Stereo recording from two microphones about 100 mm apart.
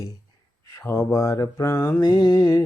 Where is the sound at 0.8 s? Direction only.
25° left (ahead or behind).